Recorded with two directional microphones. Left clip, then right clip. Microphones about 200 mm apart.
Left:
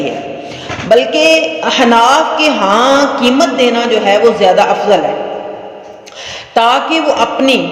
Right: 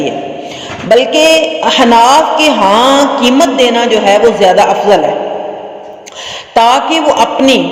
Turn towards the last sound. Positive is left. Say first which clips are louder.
# right 3 dB
turn(degrees=-40)  # may be behind; listen again after turning